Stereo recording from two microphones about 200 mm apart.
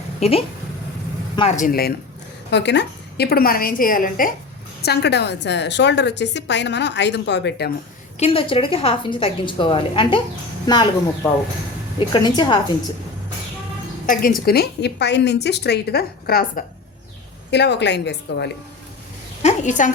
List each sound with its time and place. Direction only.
0.2 s a woman's voice: 30° left (ahead or behind); by 1.9 s 45° left (ahead or behind)
2.5 s a woman's voice: 60° left (ahead or behind); by 4.4 s 45° left (ahead or behind)
4.8 s a woman's voice: 55° left (ahead or behind)
8.2 s a woman's voice: 25° left (ahead or behind)
14.1 s a woman's voice: 45° left (ahead or behind)
17.5 s a woman's voice: 60° left (ahead or behind)
19.4 s a woman's voice: 35° left (ahead or behind)